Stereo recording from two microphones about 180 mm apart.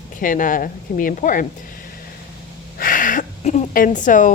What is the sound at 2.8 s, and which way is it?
Gasp, 50° left (ahead or behind).